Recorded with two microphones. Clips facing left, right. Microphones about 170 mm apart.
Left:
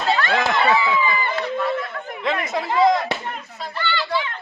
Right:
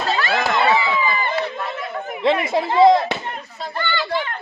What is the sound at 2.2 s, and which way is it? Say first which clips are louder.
Speech: right 5 dB; 30° right (ahead or behind).